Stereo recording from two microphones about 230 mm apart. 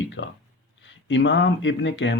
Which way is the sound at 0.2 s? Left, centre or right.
Left.